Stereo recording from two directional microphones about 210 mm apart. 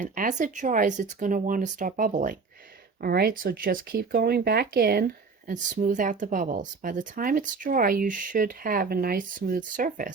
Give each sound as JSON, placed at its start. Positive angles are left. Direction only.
{"t": 0.0, "sound": "speech", "side_deg": -40}